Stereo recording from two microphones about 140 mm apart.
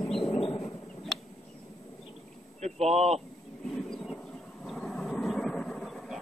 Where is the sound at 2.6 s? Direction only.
50° right (ahead or behind).